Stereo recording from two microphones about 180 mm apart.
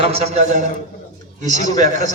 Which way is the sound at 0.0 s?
35° right (ahead or behind).